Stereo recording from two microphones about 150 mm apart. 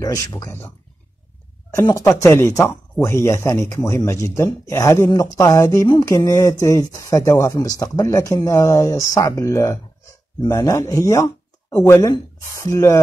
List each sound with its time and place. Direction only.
0.0 s speech: 25° left (ahead or behind)
1.9 s speech: 20° left (ahead or behind)